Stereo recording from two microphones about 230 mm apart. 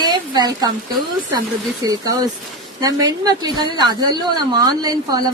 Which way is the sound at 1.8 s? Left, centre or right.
Centre.